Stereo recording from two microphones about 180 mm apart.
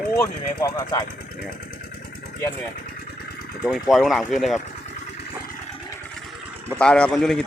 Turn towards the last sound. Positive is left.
turn(degrees=0)  # may be behind; listen again after turning